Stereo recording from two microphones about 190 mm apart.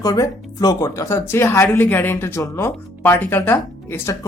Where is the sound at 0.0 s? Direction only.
20° left (ahead or behind).